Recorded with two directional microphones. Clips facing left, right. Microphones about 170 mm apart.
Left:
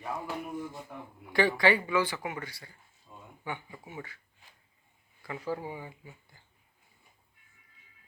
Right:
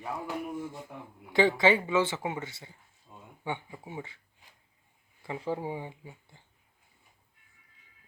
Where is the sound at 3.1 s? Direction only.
15° right (ahead or behind).